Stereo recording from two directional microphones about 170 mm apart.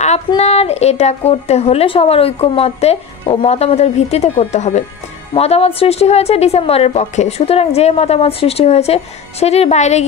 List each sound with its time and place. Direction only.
0.4 s speech: 40° left (ahead or behind)